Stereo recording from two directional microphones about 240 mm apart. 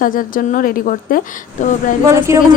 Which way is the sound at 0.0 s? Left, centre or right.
Left.